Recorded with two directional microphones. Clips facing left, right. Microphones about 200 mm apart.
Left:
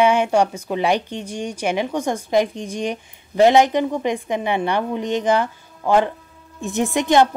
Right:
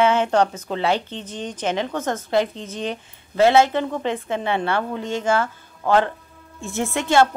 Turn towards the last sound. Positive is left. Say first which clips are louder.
# left 2 dB
turn(degrees=15)  # may be behind; listen again after turning